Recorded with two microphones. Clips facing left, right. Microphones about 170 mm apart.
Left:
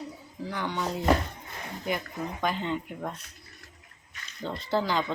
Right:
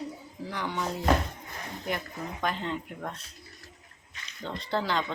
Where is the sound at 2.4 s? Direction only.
Centre (ahead or behind).